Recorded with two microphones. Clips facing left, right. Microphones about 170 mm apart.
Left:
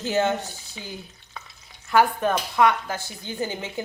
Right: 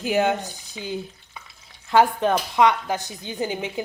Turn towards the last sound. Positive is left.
turn(degrees=-15)  # may be behind; listen again after turning